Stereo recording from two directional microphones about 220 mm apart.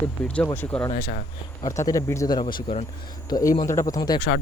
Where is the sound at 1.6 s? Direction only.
15° left (ahead or behind).